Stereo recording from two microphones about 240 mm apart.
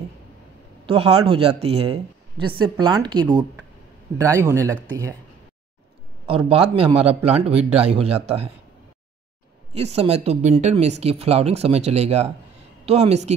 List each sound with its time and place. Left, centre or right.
0.8 s speech: right
6.2 s speech: right
9.8 s speech: right